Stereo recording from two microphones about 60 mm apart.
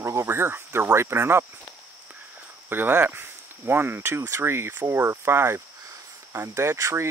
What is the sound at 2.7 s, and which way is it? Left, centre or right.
Speech, right.